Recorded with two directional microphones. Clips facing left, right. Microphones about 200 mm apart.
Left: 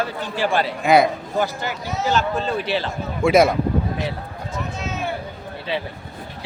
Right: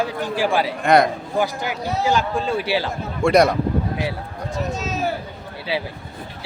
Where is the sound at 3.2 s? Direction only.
Centre (ahead or behind).